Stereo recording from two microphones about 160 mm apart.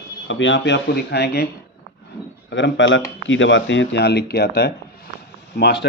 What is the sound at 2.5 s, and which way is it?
Speech, 90° left.